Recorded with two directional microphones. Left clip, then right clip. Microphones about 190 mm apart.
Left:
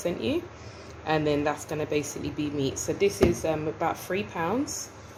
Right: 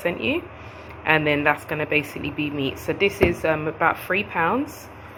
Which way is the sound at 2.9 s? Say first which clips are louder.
Right 4 dB; centre (ahead or behind).